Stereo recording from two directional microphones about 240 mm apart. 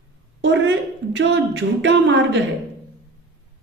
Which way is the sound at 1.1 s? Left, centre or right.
Right.